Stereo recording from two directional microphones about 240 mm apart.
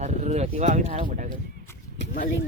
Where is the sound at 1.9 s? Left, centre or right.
Left.